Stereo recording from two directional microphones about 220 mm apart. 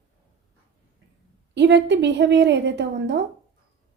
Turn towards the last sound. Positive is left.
turn(degrees=-55)  # may be behind; listen again after turning